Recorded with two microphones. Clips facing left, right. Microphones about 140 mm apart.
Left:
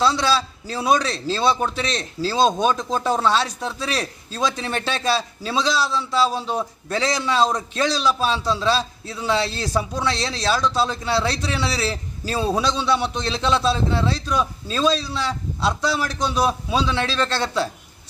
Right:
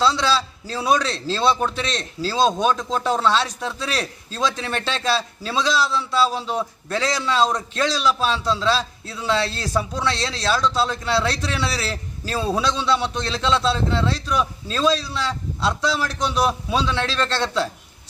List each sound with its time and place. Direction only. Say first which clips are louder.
0.0 s a man's voice: even; 10° left (ahead or behind)